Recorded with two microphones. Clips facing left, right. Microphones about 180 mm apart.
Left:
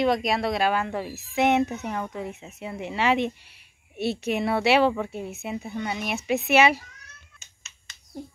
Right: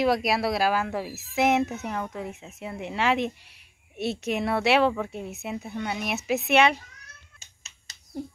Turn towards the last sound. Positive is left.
turn(degrees=-35)  # may be behind; listen again after turning